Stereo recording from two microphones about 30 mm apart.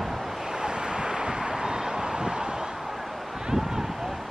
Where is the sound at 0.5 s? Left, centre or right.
Right.